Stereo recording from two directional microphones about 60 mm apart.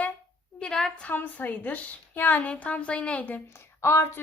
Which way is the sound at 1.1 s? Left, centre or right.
Left.